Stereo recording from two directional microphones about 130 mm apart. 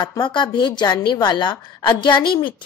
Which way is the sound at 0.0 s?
35° left (ahead or behind).